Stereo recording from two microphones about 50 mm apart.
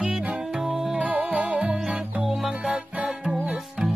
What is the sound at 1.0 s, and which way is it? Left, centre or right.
Music, right.